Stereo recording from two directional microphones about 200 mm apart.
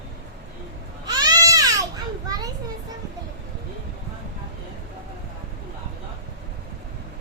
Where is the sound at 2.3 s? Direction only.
20° right (ahead or behind).